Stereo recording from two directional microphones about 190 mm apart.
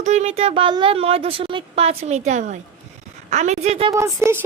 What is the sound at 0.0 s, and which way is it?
Speech, 35° right (ahead or behind).